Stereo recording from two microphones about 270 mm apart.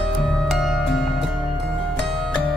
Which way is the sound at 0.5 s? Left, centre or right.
Centre.